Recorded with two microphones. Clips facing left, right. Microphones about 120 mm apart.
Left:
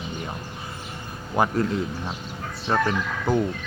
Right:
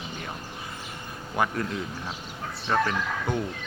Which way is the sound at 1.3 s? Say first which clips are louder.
Left 4 dB; 30° left (ahead or behind).